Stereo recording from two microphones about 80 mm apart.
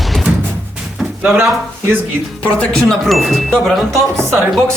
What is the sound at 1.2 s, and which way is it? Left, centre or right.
Speech, centre.